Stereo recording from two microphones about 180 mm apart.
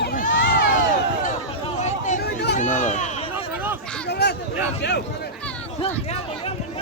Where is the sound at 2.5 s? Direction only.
45° left (ahead or behind).